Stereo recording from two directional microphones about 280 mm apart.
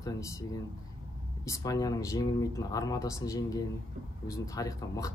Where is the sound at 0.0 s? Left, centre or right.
Centre.